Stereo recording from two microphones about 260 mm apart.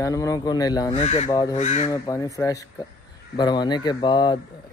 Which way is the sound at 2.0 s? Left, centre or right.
Centre.